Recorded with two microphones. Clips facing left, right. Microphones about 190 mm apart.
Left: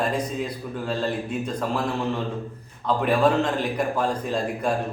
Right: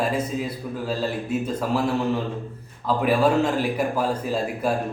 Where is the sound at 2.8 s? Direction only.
5° right (ahead or behind).